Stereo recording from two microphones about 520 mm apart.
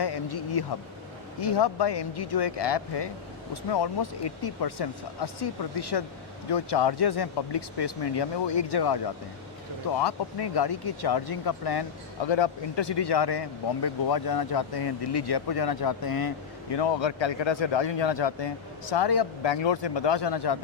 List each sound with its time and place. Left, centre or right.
0.0 s speech: left
10.0 s speech: left
16.7 s speech: left